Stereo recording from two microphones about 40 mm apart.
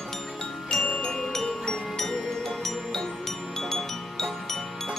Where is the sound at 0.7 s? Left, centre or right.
Centre.